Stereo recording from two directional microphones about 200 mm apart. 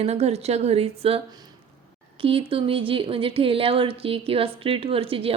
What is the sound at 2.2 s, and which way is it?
A woman's voice, 25° right (ahead or behind).